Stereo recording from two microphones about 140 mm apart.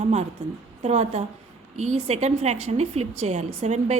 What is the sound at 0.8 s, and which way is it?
A woman's voice, 50° right (ahead or behind).